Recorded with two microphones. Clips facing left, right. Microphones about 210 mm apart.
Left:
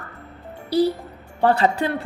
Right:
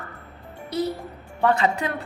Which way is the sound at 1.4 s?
35° left (ahead or behind).